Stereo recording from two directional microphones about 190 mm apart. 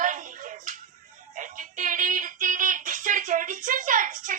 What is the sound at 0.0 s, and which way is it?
Music, 45° right (ahead or behind).